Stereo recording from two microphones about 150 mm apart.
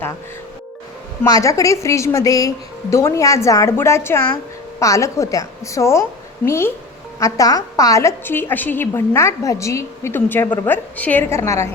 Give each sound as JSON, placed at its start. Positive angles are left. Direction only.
{"t": 1.2, "sound": "a woman's voice", "side_deg": 20}